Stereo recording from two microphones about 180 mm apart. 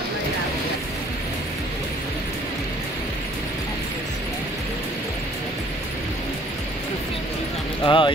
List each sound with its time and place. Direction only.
7.8 s speech: 25° left (ahead or behind)